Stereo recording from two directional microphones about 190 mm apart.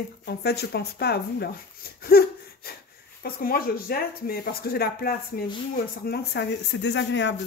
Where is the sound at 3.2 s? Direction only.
50° left (ahead or behind); by 7.3 s 70° left (ahead or behind).